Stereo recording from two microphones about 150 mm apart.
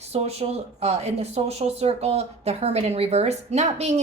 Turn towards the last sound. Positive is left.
turn(degrees=-50)  # may be behind; listen again after turning